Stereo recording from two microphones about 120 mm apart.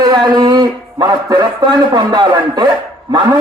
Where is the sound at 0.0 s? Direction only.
35° right (ahead or behind).